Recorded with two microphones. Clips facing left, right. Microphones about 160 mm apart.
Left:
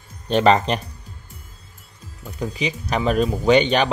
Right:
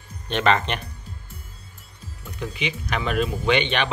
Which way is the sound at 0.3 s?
35° left (ahead or behind).